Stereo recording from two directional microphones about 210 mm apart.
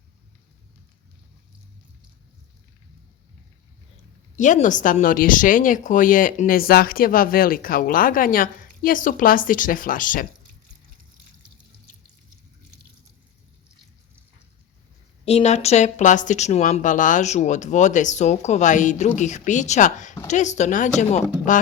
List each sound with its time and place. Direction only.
4.4 s speech: 35° left (ahead or behind)
15.2 s speech: 30° left (ahead or behind)